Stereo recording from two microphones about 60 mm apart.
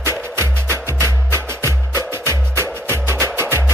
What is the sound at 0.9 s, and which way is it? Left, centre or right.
Music, right.